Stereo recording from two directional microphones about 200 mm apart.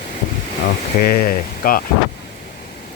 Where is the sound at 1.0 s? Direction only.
50° left (ahead or behind).